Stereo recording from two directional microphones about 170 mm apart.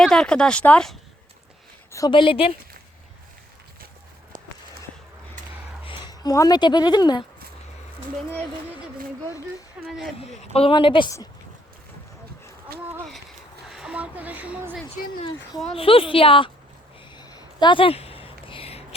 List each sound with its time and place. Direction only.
0.0 s speech: 5° left (ahead or behind)
1.9 s a woman's voice: 25° left (ahead or behind)
4.3 s a sound: 50° right (ahead or behind)
5.8 s speech: 25° left (ahead or behind)
9.8 s speech: 5° right (ahead or behind)
10.2 s a woman's voice: 35° left (ahead or behind)
13.7 s a woman's voice: 5° right (ahead or behind)
15.7 s a woman's voice: 30° left (ahead or behind)
17.2 s a sound: 25° left (ahead or behind)